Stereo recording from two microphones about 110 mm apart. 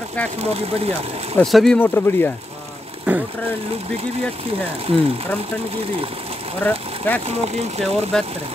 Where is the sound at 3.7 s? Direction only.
70° right (ahead or behind).